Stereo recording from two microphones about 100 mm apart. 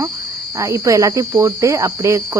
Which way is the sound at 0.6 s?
35° right (ahead or behind).